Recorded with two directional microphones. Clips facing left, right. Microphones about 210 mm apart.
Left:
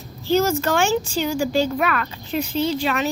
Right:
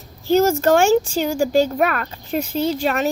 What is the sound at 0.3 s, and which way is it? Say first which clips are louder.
Speech: right 4 dB; 45° right (ahead or behind).